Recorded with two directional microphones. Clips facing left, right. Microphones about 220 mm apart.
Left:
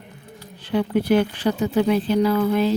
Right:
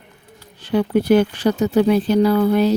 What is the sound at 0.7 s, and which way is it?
Speech, 45° right (ahead or behind).